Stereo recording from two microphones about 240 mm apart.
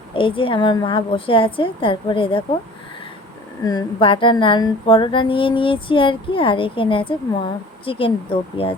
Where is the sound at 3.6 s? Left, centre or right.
Centre.